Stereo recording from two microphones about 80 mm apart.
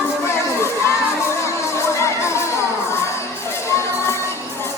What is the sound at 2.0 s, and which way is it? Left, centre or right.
Music, left.